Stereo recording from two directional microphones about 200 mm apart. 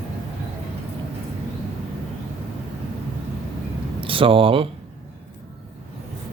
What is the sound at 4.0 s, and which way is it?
Speech, 25° right (ahead or behind).